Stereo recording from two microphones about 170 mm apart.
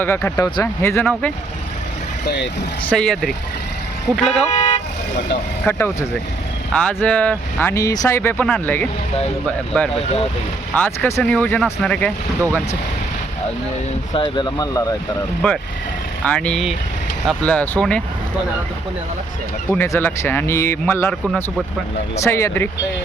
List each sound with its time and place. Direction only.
0.0 s speech: 15° left (ahead or behind)
2.2 s speech: 85° left
2.8 s speech: 5° left (ahead or behind)
5.6 s speech: 15° left (ahead or behind)
10.8 s speech: 10° left (ahead or behind)
14.1 s speech: 25° left (ahead or behind)
15.4 s speech: 5° left (ahead or behind)
19.7 s speech: 15° left (ahead or behind)